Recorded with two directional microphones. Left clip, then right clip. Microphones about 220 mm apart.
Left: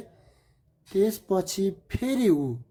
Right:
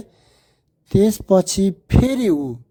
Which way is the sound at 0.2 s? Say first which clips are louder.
Right 5 dB; 35° right (ahead or behind).